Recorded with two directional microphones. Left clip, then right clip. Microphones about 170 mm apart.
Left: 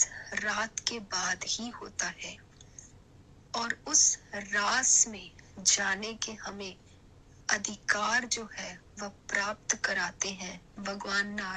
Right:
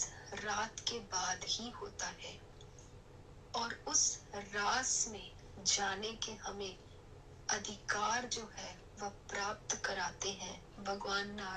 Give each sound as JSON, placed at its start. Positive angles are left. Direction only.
{"t": 0.0, "sound": "speech", "side_deg": 40}
{"t": 3.5, "sound": "a woman's voice", "side_deg": 40}